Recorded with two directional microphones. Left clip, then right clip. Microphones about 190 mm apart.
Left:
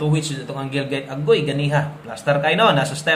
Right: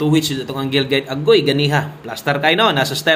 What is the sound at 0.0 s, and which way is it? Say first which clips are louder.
A man's voice: right 7 dB; 35° right (ahead or behind).